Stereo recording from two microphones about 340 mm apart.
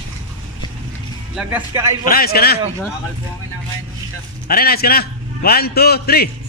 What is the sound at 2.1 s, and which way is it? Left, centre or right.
Speech, left.